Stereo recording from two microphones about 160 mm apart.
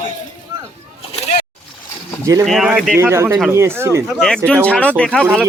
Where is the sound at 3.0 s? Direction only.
15° right (ahead or behind).